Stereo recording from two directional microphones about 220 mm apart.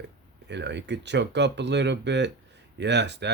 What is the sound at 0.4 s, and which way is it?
Speech, 50° right (ahead or behind).